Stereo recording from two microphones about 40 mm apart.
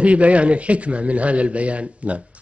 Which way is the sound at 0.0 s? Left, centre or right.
Right.